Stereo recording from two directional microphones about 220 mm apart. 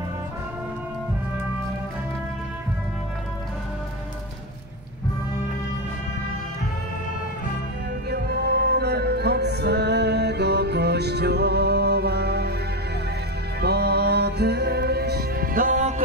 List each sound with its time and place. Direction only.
8.1 s music: 45° right (ahead or behind)
13.6 s music: 45° right (ahead or behind)